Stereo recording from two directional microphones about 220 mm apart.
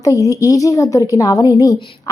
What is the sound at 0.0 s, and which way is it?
A woman's voice, 15° left (ahead or behind).